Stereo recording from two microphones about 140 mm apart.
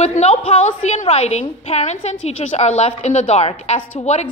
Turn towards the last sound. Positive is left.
turn(degrees=55)  # may be behind; listen again after turning